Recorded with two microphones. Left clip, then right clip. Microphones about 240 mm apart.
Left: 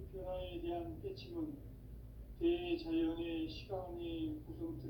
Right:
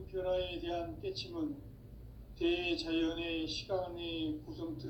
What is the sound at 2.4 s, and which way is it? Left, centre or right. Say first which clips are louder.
Speech: right 3 dB; right.